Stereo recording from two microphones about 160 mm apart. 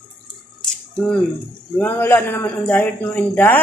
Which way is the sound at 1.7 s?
10° left (ahead or behind).